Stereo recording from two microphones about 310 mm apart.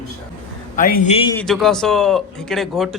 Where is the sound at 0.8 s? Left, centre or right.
Left.